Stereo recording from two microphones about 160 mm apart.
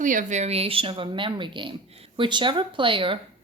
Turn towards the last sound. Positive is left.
turn(degrees=-30)  # may be behind; listen again after turning